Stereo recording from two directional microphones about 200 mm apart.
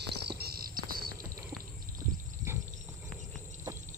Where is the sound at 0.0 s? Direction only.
55° right (ahead or behind).